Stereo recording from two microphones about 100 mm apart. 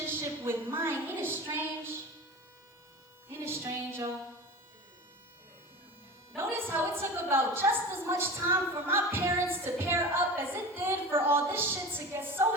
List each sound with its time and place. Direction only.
0.1 s a woman's voice: 20° right (ahead or behind)
3.2 s music: 25° right (ahead or behind)
6.3 s a woman's voice: 25° right (ahead or behind)